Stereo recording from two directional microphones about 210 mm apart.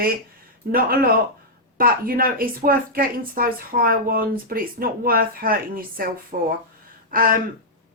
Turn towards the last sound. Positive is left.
turn(degrees=-40)  # may be behind; listen again after turning